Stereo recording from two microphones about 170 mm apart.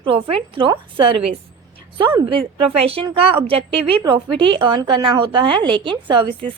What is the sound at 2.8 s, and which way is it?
Speech, 35° right (ahead or behind).